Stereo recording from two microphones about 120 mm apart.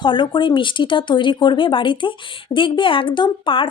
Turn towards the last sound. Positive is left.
turn(degrees=45)  # may be behind; listen again after turning